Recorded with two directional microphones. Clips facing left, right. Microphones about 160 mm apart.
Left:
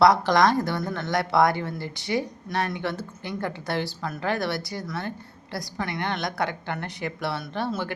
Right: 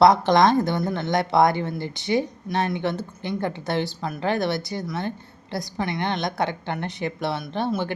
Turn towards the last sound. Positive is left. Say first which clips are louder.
# right 3 dB
turn(degrees=-20)  # may be behind; listen again after turning